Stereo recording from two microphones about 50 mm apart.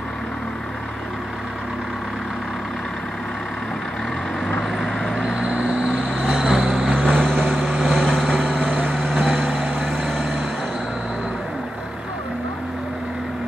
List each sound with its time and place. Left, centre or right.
4.6 s vehicle: centre
5.1 s vehicle: centre
7.1 s vehicle: centre
7.4 s vehicle: centre
8.7 s vehicle: right
9.0 s vehicle: centre
9.6 s vehicle: right
9.8 s vehicle: centre